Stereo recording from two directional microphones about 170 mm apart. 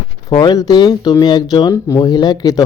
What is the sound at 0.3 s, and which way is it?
Speech, 25° left (ahead or behind).